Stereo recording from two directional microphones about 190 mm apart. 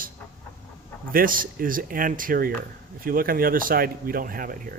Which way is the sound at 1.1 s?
50° right (ahead or behind).